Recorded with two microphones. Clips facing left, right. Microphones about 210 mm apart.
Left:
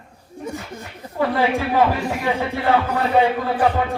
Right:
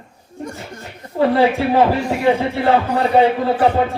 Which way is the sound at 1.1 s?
30° right (ahead or behind).